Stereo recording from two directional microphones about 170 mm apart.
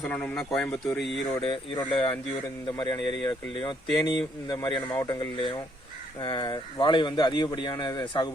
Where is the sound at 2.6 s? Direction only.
25° left (ahead or behind).